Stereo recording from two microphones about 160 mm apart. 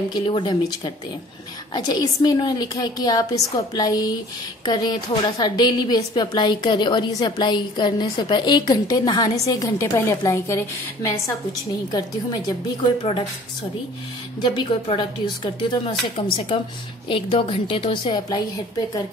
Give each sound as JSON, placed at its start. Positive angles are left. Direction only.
{"t": 0.1, "sound": "a woman's voice", "side_deg": 30}
{"t": 14.4, "sound": "speech", "side_deg": 30}